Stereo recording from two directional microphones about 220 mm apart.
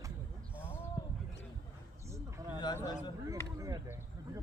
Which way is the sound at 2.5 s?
20° left (ahead or behind).